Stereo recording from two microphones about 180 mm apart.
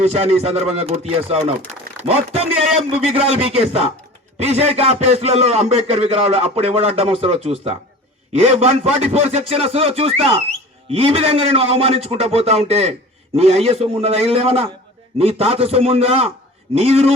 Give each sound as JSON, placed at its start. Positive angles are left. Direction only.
{"t": 0.0, "sound": "a man's voice", "side_deg": -35}